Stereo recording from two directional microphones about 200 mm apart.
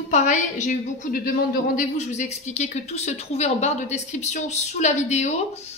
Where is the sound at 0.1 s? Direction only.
35° left (ahead or behind).